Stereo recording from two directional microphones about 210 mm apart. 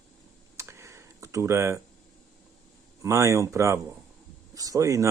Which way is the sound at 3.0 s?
15° right (ahead or behind).